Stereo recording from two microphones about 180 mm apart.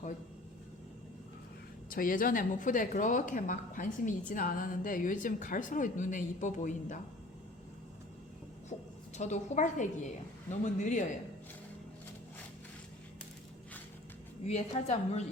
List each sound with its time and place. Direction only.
1.9 s a woman's voice: 50° left (ahead or behind)
8.7 s a sound: 35° left (ahead or behind)
9.1 s a woman's voice: 40° left (ahead or behind)
14.4 s a woman's voice: 35° left (ahead or behind)